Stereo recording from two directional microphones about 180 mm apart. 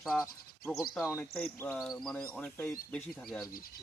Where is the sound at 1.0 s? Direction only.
15° left (ahead or behind).